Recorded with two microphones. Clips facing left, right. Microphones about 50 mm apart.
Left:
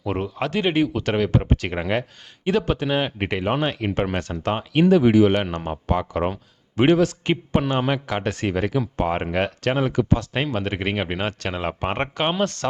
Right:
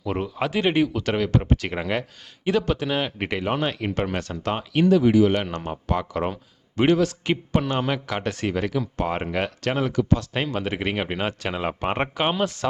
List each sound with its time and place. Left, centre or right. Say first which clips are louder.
0.1 s speech: left 1 dB; centre
4.9 s speech: left 2 dB; left
5.3 s speech: left 2 dB; centre
10.2 s speech: left 2 dB; centre